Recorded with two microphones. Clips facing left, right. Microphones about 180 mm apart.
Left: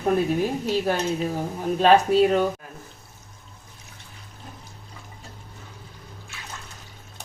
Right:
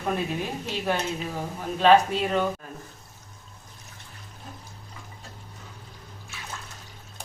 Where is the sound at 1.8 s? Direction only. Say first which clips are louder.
Left 2 dB; 40° left (ahead or behind).